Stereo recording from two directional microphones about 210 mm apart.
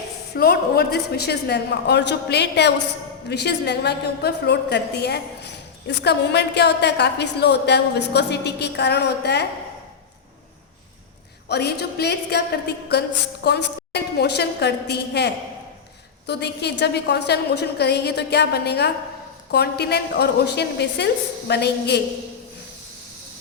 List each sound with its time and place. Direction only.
0.3 s a woman's voice: 45° left (ahead or behind)
11.4 s a woman's voice: 50° left (ahead or behind)